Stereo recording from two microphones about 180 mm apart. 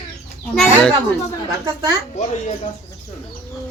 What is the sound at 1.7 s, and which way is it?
Speech, 25° right (ahead or behind).